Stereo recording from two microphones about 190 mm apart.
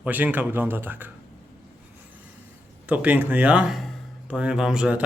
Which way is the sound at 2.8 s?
10° right (ahead or behind).